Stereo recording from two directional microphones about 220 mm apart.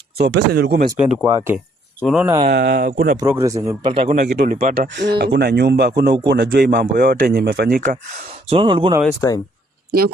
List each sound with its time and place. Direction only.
0.2 s speech: 50° right (ahead or behind)
0.9 s speech: 5° right (ahead or behind)
1.2 s speech: 15° right (ahead or behind)
2.0 s speech: centre (ahead or behind)
2.2 s speech: 15° right (ahead or behind)
2.5 s speech: 50° right (ahead or behind)
3.2 s speech: 10° right (ahead or behind); by 4.3 s 30° right (ahead or behind)
4.3 s speech: 50° right (ahead or behind); by 9.0 s 20° right (ahead or behind)
9.0 s speech: 15° left (ahead or behind)